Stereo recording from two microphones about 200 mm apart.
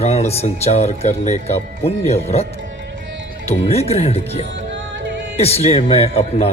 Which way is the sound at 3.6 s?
30° left (ahead or behind).